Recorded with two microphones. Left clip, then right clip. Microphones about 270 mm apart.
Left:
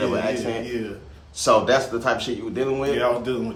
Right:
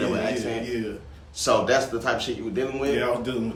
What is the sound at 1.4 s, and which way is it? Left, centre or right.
A man's voice, left.